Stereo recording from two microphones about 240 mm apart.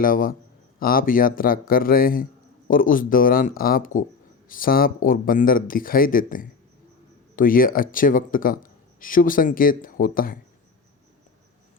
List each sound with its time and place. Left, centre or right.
0.0 s a man's voice: left
7.3 s a man's voice: left